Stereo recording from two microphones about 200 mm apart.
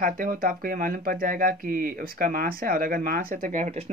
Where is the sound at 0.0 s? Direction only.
45° right (ahead or behind).